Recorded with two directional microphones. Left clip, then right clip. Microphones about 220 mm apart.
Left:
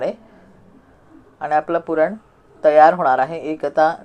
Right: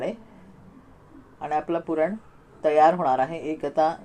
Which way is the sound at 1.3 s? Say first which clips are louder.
Left 8 dB; 15° left (ahead or behind).